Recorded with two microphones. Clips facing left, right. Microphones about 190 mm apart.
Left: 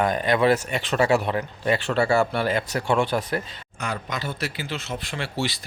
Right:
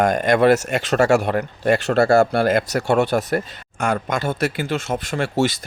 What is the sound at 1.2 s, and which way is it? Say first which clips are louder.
Speech: right 5 dB; 45° right (ahead or behind).